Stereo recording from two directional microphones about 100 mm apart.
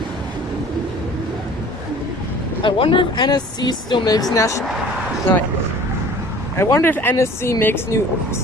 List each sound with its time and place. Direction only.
2.6 s speech: 60° left (ahead or behind)
3.2 s speech: 45° left (ahead or behind)
6.6 s speech: 25° left (ahead or behind)